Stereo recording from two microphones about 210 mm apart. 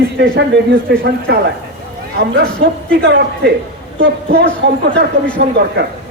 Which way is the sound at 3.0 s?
50° right (ahead or behind).